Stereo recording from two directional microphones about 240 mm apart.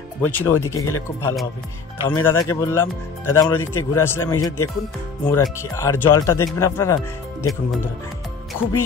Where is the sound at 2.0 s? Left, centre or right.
Centre.